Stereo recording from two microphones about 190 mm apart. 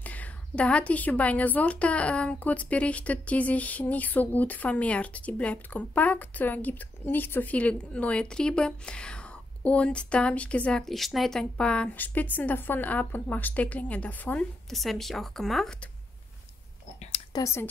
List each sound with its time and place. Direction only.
0.0 s a woman's voice: 10° left (ahead or behind)
17.3 s speech: 15° left (ahead or behind)